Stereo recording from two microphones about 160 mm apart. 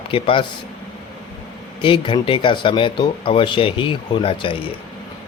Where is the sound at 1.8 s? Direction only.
30° left (ahead or behind).